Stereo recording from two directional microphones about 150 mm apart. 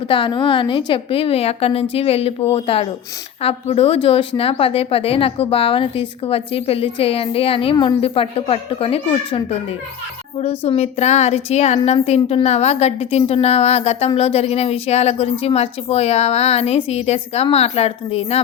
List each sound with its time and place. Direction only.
0.1 s speech: 30° left (ahead or behind)
10.6 s speech: 45° left (ahead or behind)